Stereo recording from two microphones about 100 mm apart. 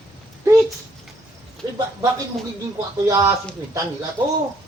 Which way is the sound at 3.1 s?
35° right (ahead or behind).